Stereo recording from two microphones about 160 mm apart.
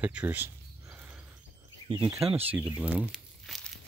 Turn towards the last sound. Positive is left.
turn(degrees=0)  # may be behind; listen again after turning